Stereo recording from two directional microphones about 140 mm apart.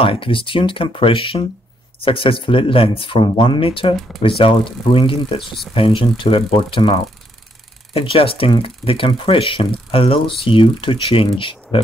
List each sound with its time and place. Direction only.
0.0 s speech: 40° left (ahead or behind)